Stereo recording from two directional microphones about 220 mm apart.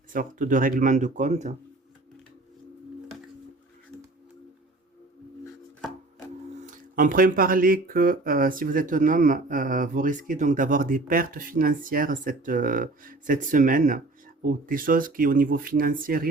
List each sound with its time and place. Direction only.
0.1 s speech: 35° right (ahead or behind)
6.7 s speech: 40° right (ahead or behind)